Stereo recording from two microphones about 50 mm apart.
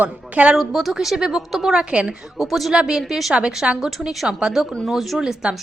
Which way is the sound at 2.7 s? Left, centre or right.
Centre.